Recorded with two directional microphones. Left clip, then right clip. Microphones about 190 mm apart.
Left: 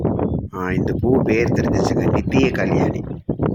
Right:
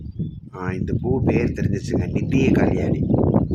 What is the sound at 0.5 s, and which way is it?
Speech, 20° left (ahead or behind).